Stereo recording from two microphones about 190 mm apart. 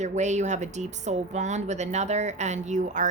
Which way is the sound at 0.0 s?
40° right (ahead or behind).